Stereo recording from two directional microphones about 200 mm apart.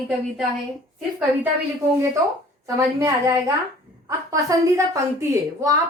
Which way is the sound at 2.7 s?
15° right (ahead or behind).